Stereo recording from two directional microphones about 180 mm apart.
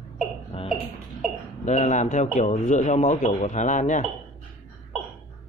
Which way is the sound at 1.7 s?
40° left (ahead or behind).